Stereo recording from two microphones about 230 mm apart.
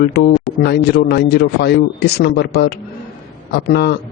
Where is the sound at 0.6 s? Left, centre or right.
Left.